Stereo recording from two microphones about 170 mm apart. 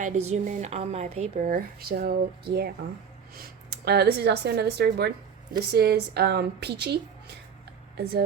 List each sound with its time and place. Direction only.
0.0 s a woman's voice: 50° right (ahead or behind); by 8.2 s 70° right (ahead or behind)